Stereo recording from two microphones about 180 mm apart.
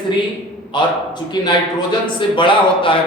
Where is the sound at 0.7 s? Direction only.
25° left (ahead or behind).